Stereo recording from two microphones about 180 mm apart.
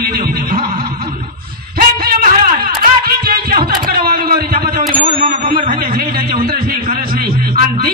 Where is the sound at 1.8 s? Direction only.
50° right (ahead or behind).